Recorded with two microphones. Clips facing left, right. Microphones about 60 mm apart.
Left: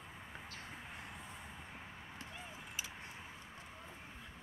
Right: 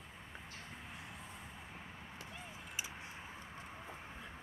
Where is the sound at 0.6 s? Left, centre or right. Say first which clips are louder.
Left 1 dB; centre.